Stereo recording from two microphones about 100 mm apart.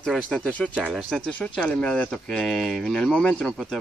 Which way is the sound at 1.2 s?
10° left (ahead or behind).